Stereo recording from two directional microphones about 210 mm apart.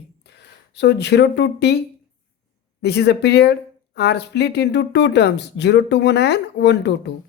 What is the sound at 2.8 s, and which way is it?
Speech, 50° left (ahead or behind).